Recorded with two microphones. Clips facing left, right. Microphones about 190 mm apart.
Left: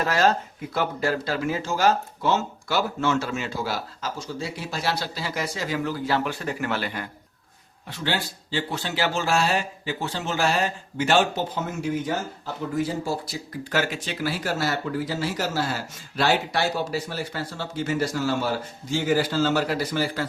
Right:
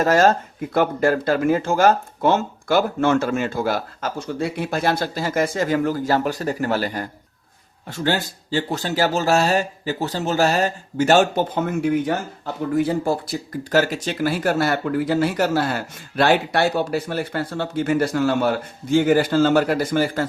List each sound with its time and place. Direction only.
0.0 s speech: 45° right (ahead or behind)